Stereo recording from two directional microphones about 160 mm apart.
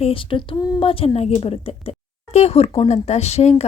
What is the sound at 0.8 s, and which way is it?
Speech, 35° left (ahead or behind).